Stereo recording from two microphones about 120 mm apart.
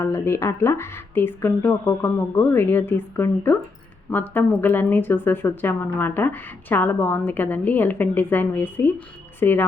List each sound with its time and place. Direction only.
0.0 s speech: 20° left (ahead or behind)